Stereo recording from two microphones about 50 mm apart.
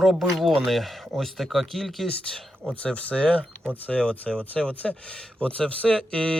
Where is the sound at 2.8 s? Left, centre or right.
Left.